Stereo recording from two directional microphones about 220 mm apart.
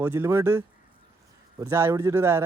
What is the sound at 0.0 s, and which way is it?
Speech, 10° right (ahead or behind).